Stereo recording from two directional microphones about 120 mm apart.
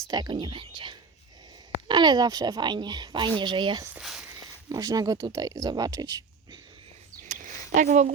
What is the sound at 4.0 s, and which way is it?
Speech, 5° right (ahead or behind).